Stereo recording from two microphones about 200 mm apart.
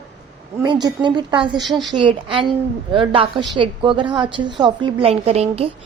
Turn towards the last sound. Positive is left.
turn(degrees=-30)  # may be behind; listen again after turning